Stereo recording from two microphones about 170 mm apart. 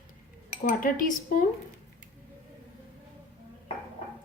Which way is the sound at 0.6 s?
55° left (ahead or behind).